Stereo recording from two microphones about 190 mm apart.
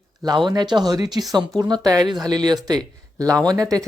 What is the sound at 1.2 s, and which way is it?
Speech, centre (ahead or behind).